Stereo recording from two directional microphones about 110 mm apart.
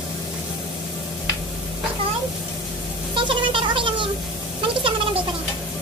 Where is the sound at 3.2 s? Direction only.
50° right (ahead or behind).